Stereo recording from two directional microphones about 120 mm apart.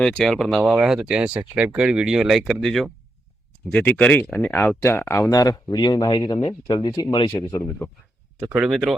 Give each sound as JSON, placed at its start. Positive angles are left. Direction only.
{"t": 0.0, "sound": "speech", "side_deg": 5}
{"t": 3.7, "sound": "speech", "side_deg": 10}
{"t": 7.3, "sound": "speech", "side_deg": 25}
{"t": 8.4, "sound": "speech", "side_deg": -15}
{"t": 8.6, "sound": "speech", "side_deg": -5}